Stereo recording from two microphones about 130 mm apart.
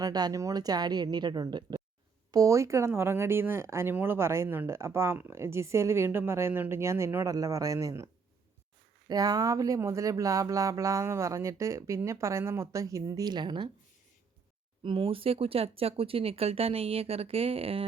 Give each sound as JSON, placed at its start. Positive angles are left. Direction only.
{"t": 0.0, "sound": "a woman's voice", "side_deg": -30}
{"t": 14.8, "sound": "speech", "side_deg": -45}